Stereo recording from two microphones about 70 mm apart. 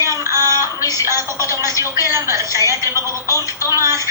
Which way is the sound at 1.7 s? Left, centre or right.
Left.